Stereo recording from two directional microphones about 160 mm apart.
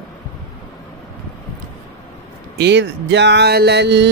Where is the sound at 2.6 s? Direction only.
90° right.